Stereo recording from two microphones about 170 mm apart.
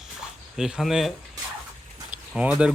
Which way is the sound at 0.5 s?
5° right (ahead or behind).